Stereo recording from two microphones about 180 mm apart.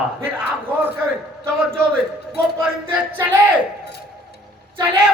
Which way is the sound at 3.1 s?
10° right (ahead or behind).